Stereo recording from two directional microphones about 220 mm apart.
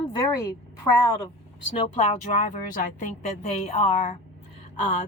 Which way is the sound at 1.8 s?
25° left (ahead or behind).